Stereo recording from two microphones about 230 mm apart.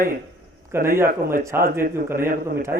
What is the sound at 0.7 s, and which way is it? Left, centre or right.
Speech, centre.